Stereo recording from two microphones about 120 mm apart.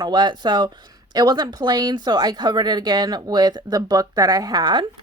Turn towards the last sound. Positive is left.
turn(degrees=-35)  # may be behind; listen again after turning